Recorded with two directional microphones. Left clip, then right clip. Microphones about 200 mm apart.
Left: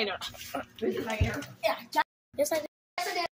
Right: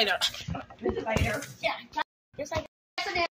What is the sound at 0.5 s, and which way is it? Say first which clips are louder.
Speech: left 3 dB; 50° left (ahead or behind).